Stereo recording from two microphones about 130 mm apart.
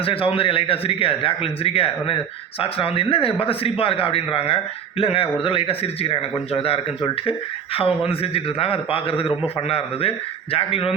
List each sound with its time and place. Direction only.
0.0 s a man's voice: 45° left (ahead or behind)